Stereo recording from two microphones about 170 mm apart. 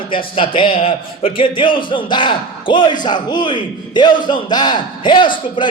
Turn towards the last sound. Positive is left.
turn(degrees=30)  # may be behind; listen again after turning